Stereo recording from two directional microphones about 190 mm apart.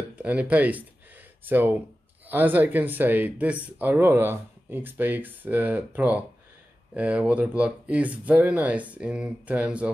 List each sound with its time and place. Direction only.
0.1 s speech: 5° right (ahead or behind)